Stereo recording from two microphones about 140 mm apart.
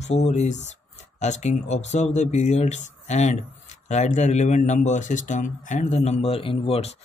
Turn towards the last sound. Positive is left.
turn(degrees=45)  # may be behind; listen again after turning